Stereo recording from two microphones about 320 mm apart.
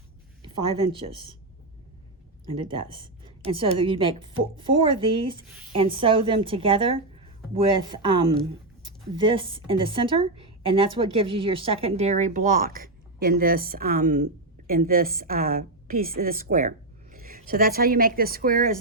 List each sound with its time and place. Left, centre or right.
0.4 s speech: centre
2.6 s a woman's voice: centre